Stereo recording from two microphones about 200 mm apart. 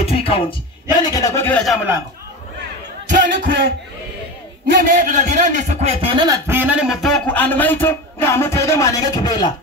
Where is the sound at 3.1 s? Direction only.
40° right (ahead or behind).